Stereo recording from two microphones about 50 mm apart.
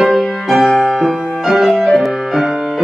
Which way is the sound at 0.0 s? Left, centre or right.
Centre.